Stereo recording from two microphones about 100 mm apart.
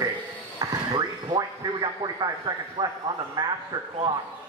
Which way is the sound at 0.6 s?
45° right (ahead or behind).